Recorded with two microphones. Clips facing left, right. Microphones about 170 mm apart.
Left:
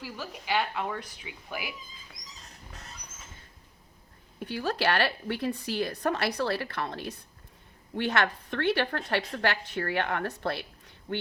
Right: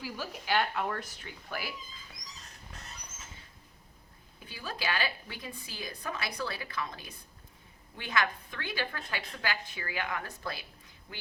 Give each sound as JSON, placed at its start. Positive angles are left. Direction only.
{"t": 0.0, "sound": "a woman's voice", "side_deg": 0}
{"t": 4.4, "sound": "a woman's voice", "side_deg": 75}